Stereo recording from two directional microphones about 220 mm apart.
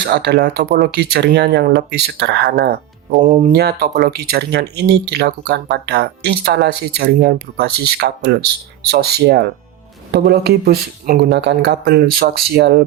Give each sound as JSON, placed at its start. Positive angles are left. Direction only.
{"t": 0.0, "sound": "speech", "side_deg": -45}